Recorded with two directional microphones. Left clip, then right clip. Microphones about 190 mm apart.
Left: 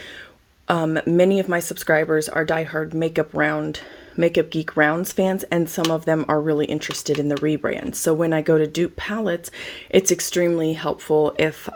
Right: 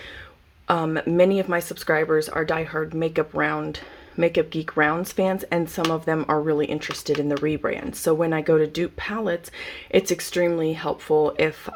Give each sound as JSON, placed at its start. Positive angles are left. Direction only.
{"t": 0.7, "sound": "speech", "side_deg": 25}